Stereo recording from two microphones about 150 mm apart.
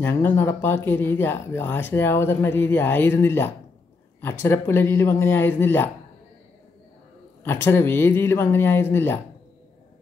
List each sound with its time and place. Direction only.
0.0 s speech: 15° left (ahead or behind)
7.4 s speech: 15° left (ahead or behind)